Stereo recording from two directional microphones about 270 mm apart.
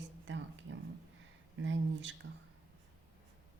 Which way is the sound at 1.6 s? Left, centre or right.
Right.